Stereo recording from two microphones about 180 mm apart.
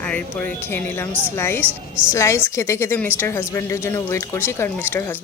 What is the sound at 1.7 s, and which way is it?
Speech, 5° right (ahead or behind).